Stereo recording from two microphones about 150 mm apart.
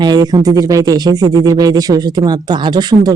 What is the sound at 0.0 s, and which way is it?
Speech, 30° right (ahead or behind).